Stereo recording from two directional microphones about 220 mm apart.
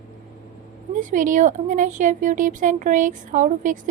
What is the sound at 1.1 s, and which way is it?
Speech, 35° right (ahead or behind).